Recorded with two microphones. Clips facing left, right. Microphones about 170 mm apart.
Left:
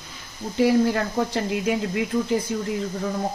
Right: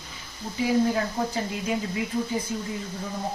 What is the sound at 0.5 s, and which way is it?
Speech, 70° left (ahead or behind).